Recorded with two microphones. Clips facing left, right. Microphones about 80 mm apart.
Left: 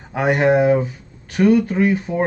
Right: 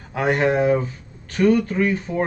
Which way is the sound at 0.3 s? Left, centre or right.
Centre.